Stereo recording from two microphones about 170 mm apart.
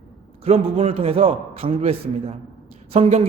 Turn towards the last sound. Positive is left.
turn(degrees=-35)  # may be behind; listen again after turning